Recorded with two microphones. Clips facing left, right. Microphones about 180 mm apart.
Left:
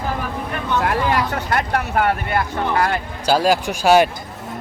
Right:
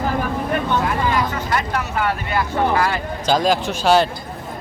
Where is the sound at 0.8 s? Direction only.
65° left (ahead or behind).